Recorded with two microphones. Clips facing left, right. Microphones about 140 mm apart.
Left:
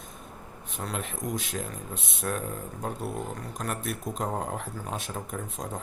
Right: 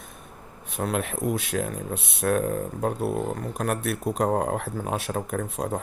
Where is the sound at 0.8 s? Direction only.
60° right (ahead or behind).